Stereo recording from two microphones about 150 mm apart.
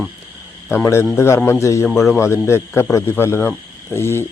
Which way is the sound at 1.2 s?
15° left (ahead or behind).